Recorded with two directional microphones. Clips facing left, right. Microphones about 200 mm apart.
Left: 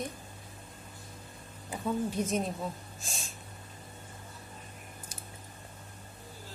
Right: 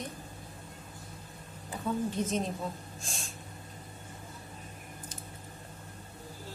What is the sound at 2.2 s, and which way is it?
Speech, 10° left (ahead or behind).